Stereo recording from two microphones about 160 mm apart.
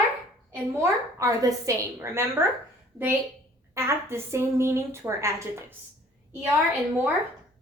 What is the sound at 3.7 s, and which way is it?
A woman's voice, 15° right (ahead or behind).